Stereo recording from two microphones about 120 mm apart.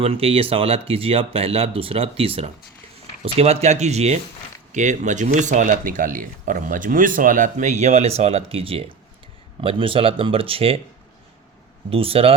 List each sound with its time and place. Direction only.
0.0 s speech: 50° right (ahead or behind)
4.7 s speech: 90° right; by 10.8 s 50° right (ahead or behind)
11.9 s speech: 50° right (ahead or behind)